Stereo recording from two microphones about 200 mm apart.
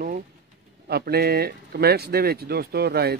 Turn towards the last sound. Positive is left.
turn(degrees=-55)  # may be behind; listen again after turning